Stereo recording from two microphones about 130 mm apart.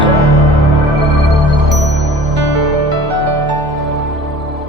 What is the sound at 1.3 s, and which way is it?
Music, centre (ahead or behind).